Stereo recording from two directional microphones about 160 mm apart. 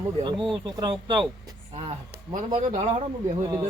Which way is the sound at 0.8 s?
30° right (ahead or behind).